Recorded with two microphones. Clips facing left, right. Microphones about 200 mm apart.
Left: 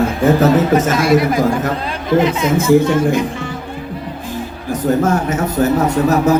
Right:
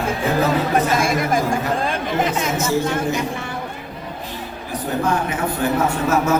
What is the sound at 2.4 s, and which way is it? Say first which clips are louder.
Speech: left 8 dB; 55° left (ahead or behind).